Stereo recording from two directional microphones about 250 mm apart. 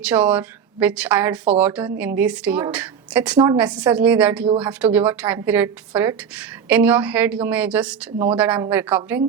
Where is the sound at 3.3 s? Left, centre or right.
Centre.